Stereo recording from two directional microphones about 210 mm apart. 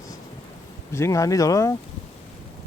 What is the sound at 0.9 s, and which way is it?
Speech, 15° left (ahead or behind).